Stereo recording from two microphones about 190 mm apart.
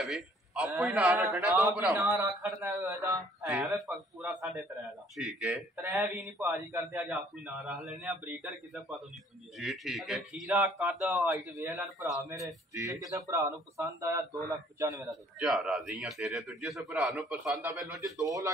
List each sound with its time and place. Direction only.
0.0 s a sound: centre (ahead or behind)
0.8 s a man's voice: 5° right (ahead or behind)
3.8 s a man's voice: centre (ahead or behind)
5.8 s a man's voice: 10° right (ahead or behind)
11.1 s a man's voice: 15° right (ahead or behind)
15.0 s a man's voice: centre (ahead or behind)
18.0 s a man's voice: 15° right (ahead or behind)